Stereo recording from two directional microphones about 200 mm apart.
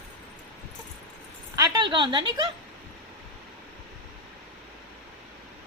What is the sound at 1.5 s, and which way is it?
Speech, 20° right (ahead or behind).